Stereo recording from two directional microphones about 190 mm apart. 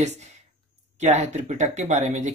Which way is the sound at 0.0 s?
35° right (ahead or behind).